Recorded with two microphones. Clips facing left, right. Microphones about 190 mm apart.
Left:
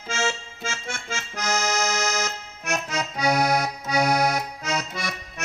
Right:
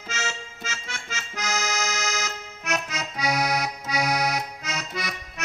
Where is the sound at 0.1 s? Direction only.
50° left (ahead or behind).